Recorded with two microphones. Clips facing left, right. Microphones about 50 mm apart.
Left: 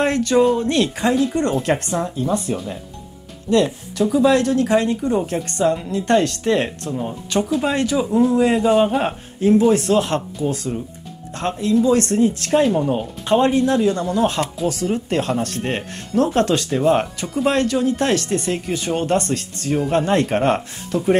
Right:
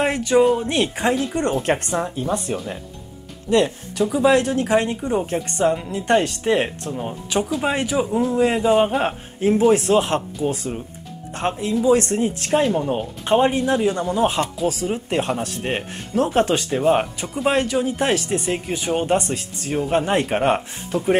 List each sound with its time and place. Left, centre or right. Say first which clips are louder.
0.0 s speech: left 1 dB; centre; by 1.9 s right
1.9 s speech: left 2 dB; centre
8.1 s speech: left 4 dB; centre
8.5 s speech: left 1 dB; centre
10.4 s speech: left 1 dB; right
11.3 s speech: left 3 dB; centre
12.5 s speech: left 2 dB; centre
12.9 s speech: left 1 dB; centre